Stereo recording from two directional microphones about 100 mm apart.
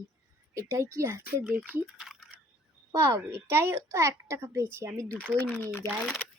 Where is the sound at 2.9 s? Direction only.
25° right (ahead or behind).